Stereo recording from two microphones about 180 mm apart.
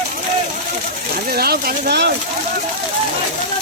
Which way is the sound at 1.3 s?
55° right (ahead or behind).